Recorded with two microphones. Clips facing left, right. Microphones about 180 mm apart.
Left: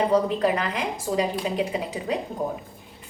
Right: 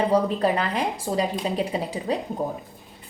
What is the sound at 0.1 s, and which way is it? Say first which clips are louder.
A woman's voice: even; 30° right (ahead or behind).